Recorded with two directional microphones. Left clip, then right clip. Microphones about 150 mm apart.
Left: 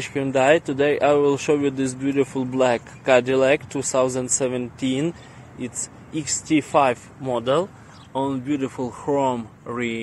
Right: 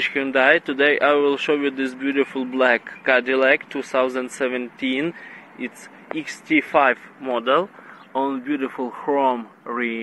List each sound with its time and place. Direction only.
0.0 s speech: 20° left (ahead or behind)
6.1 s speech: 25° left (ahead or behind)